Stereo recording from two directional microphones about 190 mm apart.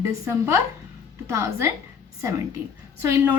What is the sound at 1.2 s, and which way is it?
A woman's voice, 15° right (ahead or behind).